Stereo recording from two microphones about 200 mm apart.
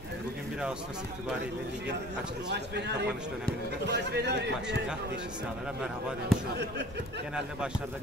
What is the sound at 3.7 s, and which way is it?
Speech, 55° right (ahead or behind).